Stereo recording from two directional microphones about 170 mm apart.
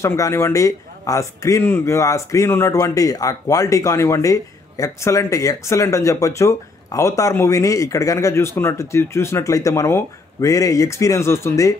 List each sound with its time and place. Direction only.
0.0 s a man's voice: 15° left (ahead or behind)